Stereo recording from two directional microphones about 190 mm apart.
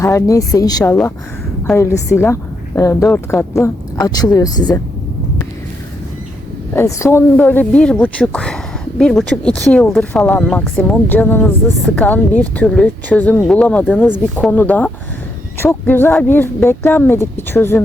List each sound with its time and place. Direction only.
0.0 s speech: 15° left (ahead or behind)
6.7 s speech: 15° left (ahead or behind)